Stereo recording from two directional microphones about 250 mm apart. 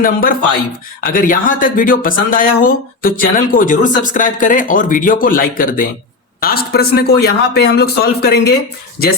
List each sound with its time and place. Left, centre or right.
0.0 s speech: left